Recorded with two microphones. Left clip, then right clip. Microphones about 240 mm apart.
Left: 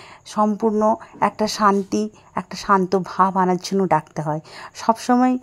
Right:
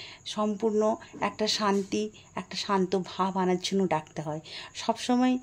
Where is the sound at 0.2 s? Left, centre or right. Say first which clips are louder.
Left 9 dB; left.